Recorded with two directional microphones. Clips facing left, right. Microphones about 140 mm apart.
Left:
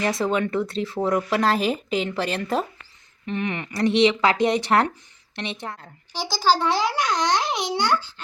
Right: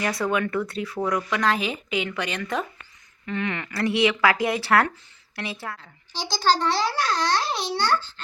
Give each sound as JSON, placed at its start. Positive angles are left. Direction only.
{"t": 0.0, "sound": "speech", "side_deg": 25}
{"t": 3.2, "sound": "speech", "side_deg": 20}
{"t": 6.1, "sound": "a child's voice", "side_deg": 5}